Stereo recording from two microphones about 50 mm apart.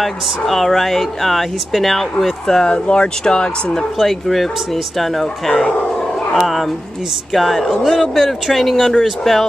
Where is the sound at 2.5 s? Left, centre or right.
Centre.